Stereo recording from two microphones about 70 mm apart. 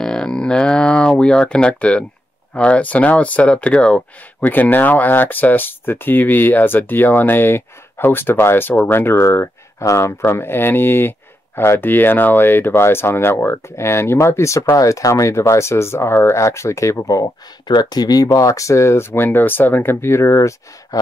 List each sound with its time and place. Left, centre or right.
0.0 s a sound: centre
2.5 s speech: centre
4.4 s speech: left
17.2 s speech: left